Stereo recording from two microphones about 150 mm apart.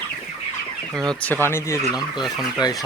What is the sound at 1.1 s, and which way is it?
Speech, 10° left (ahead or behind).